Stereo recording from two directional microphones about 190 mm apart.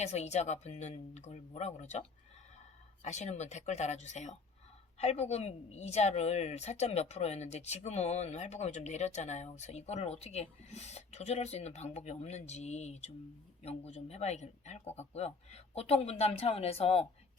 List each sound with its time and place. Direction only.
0.0 s a woman's voice: 35° left (ahead or behind)